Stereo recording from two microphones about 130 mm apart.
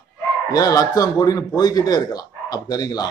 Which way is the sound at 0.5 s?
30° left (ahead or behind).